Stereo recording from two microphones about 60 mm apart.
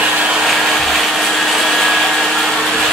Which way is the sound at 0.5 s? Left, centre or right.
Centre.